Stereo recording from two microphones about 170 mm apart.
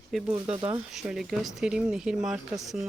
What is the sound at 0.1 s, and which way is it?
Speech, 5° right (ahead or behind).